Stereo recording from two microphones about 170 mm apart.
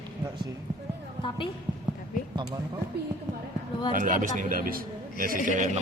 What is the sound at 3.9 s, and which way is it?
A man's voice, 50° right (ahead or behind).